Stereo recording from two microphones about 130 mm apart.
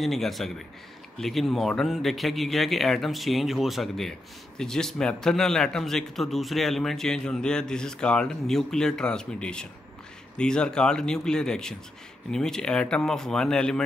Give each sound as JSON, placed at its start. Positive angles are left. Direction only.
{"t": 0.0, "sound": "a man's voice", "side_deg": 0}